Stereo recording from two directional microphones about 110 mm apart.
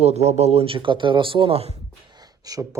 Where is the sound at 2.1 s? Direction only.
35° right (ahead or behind).